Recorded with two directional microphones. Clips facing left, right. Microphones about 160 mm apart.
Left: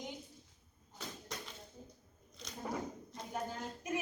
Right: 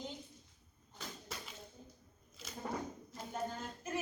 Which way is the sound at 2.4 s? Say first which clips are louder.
Even; 5° right (ahead or behind).